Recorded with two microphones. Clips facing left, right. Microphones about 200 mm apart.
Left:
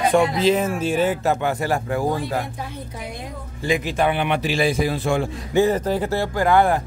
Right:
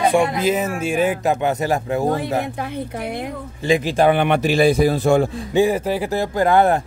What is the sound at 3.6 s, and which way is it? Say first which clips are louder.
Speech: right 4 dB; 30° right (ahead or behind).